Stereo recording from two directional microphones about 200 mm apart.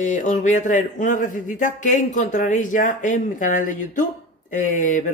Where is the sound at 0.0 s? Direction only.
35° left (ahead or behind).